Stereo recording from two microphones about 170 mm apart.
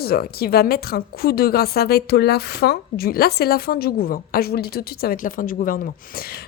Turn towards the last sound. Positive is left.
turn(degrees=60)  # may be behind; listen again after turning